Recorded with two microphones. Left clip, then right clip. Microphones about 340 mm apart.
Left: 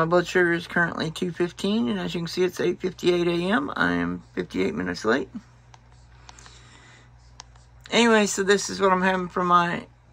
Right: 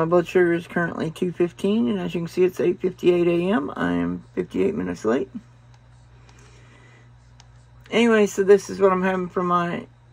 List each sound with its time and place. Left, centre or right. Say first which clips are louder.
0.0 s speech: right 2 dB; centre
7.9 s speech: right 1 dB; centre